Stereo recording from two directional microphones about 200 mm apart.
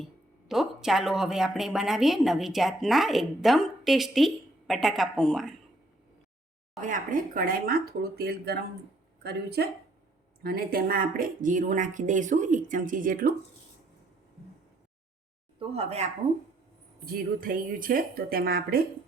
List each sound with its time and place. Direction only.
0.0 s speech: centre (ahead or behind)
6.8 s speech: 40° right (ahead or behind)
15.5 s speech: 30° right (ahead or behind)
17.1 s speech: 45° right (ahead or behind)